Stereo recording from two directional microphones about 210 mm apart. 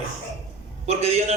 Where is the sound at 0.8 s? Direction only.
30° right (ahead or behind).